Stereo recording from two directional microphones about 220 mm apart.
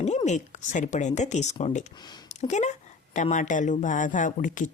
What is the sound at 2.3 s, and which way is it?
Speech, 30° left (ahead or behind).